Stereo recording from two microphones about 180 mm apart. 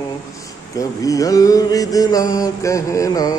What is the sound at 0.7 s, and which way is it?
Mantra, 20° left (ahead or behind).